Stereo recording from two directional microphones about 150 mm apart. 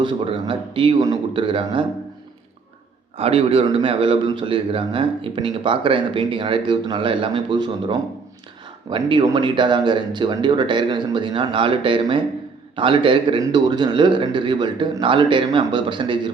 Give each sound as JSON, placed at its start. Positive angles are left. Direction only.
{"t": 0.0, "sound": "a man's voice", "side_deg": -35}
{"t": 3.2, "sound": "a man's voice", "side_deg": -40}